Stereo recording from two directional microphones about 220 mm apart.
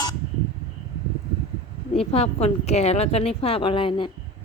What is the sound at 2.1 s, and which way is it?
A woman's voice, 30° left (ahead or behind).